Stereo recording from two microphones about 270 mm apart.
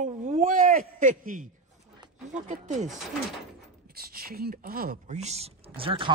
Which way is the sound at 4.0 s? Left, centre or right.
Right.